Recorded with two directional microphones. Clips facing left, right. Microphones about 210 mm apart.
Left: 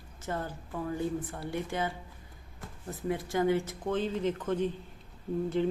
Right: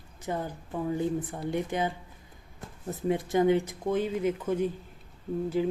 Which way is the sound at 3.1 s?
20° right (ahead or behind).